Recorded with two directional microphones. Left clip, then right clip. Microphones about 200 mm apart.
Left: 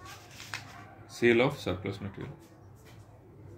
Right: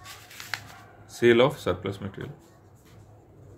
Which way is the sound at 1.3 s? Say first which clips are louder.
Right 6 dB; 40° right (ahead or behind).